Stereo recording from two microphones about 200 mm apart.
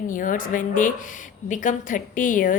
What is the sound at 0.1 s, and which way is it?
Speech, 40° left (ahead or behind).